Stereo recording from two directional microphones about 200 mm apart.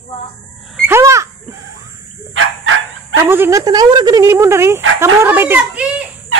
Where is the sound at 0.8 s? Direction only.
15° right (ahead or behind).